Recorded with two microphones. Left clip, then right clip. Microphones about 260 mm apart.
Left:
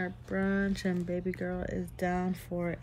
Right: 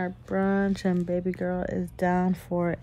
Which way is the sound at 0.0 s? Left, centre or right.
Right.